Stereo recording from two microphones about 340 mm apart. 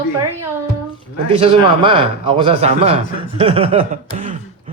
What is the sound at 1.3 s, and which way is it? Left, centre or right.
Speech, centre.